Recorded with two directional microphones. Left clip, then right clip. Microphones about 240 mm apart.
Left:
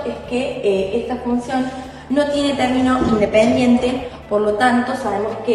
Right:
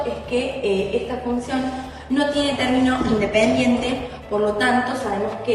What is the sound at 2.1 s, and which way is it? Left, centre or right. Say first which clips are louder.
Speech: left 3 dB; left.